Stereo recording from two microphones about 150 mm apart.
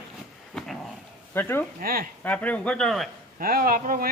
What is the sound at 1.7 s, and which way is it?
Speech, 70° right (ahead or behind).